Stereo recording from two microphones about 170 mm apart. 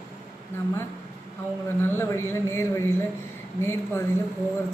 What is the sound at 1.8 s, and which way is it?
A woman's voice, 15° left (ahead or behind).